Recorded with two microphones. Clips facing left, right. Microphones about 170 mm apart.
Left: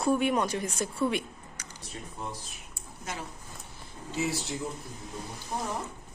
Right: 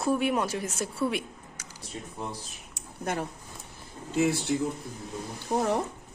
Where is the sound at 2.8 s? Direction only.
60° right (ahead or behind).